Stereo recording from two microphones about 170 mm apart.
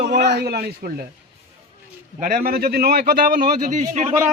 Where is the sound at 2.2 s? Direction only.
55° right (ahead or behind).